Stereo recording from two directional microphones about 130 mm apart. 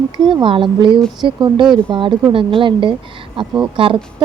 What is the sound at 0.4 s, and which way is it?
A woman's voice, 40° right (ahead or behind).